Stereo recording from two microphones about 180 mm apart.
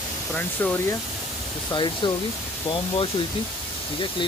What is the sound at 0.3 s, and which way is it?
Speech, 10° left (ahead or behind).